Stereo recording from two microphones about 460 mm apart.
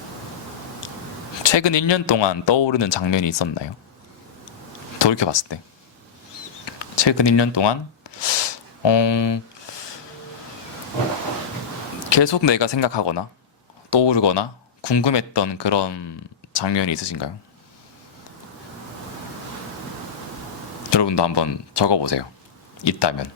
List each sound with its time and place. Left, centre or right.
1.4 s speech: left
4.9 s speech: left
6.7 s a sound: left
12.0 s speech: left
20.9 s speech: left